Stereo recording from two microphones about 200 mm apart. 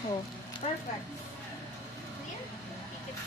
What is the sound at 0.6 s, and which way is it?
Speech, 35° left (ahead or behind).